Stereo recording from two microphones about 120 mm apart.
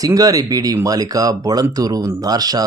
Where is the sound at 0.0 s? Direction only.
30° right (ahead or behind).